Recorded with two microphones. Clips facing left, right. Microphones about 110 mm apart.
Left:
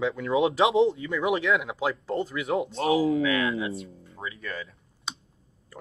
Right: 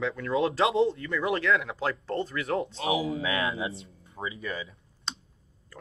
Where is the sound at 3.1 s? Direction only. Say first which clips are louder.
Left 5 dB; 30° right (ahead or behind).